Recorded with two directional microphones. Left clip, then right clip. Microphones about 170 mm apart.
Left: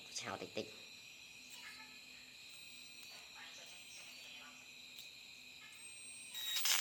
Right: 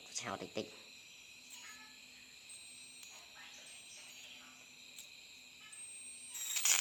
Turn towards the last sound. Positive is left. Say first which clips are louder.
# right 2 dB
turn(degrees=0)  # may be behind; listen again after turning